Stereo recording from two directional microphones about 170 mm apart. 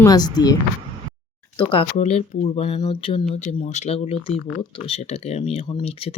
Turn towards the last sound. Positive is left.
turn(degrees=35)  # may be behind; listen again after turning